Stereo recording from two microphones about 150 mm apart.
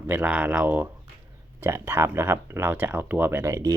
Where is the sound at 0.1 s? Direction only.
10° right (ahead or behind).